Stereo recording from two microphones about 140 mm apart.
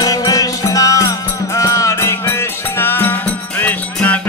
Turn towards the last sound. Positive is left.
turn(degrees=15)  # may be behind; listen again after turning